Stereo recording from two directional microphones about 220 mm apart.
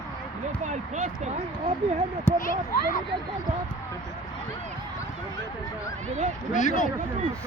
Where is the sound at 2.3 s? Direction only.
10° left (ahead or behind).